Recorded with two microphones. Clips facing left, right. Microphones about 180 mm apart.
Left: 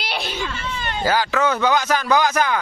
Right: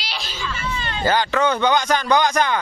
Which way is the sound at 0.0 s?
60° left (ahead or behind).